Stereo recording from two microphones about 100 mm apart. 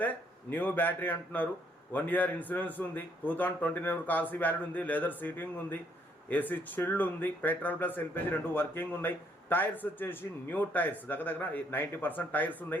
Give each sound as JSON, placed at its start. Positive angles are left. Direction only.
{"t": 0.0, "sound": "speech", "side_deg": 15}